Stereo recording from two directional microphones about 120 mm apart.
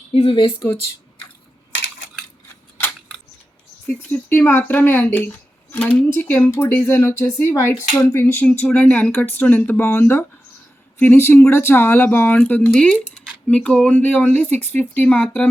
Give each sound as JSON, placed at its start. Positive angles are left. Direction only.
{"t": 0.1, "sound": "speech", "side_deg": 50}
{"t": 3.8, "sound": "speech", "side_deg": 15}